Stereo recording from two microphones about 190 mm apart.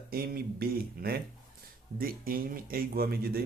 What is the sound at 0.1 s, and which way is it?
A man's voice, 50° right (ahead or behind).